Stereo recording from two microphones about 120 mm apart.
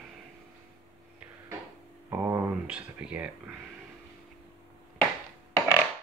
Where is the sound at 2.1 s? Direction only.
20° right (ahead or behind).